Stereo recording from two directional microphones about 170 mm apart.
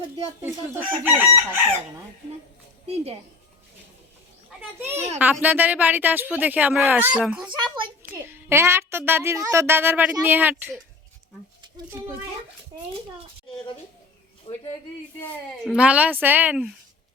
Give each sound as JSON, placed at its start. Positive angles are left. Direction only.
{"t": 0.4, "sound": "speech", "side_deg": -10}
{"t": 2.8, "sound": "a child's voice", "side_deg": -40}
{"t": 4.9, "sound": "a child's voice", "side_deg": -40}
{"t": 5.2, "sound": "speech", "side_deg": -10}
{"t": 7.6, "sound": "a child's voice", "side_deg": -30}
{"t": 8.1, "sound": "speech", "side_deg": -15}
{"t": 14.5, "sound": "speech", "side_deg": 30}
{"t": 15.6, "sound": "speech", "side_deg": -5}